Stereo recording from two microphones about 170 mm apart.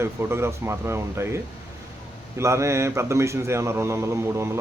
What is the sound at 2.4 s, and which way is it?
Speech, 15° right (ahead or behind).